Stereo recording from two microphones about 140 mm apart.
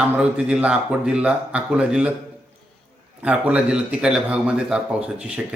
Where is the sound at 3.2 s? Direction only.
10° right (ahead or behind).